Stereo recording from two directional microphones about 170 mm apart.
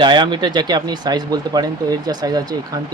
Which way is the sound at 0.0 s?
25° right (ahead or behind).